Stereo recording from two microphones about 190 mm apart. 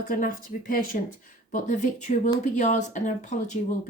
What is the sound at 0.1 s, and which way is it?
Speech, 45° left (ahead or behind).